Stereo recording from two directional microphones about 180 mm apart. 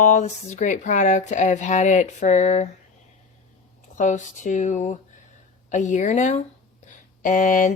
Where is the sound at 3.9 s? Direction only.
45° left (ahead or behind).